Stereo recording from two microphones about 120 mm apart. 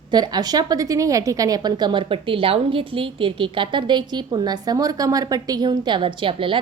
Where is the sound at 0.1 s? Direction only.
35° right (ahead or behind).